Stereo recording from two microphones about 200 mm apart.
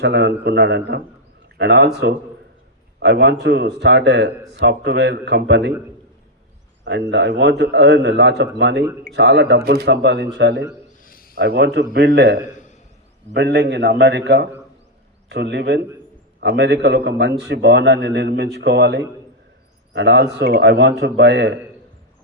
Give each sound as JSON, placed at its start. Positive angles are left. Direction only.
{"t": 0.0, "sound": "speech", "side_deg": -60}
{"t": 6.8, "sound": "speech", "side_deg": -60}
{"t": 11.0, "sound": "a sound", "side_deg": 45}
{"t": 11.3, "sound": "speech", "side_deg": -55}
{"t": 12.4, "sound": "a sound", "side_deg": 40}
{"t": 13.3, "sound": "speech", "side_deg": -60}